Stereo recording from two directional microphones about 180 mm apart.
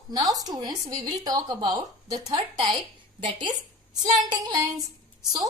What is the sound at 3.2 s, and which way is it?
Speech, 25° right (ahead or behind).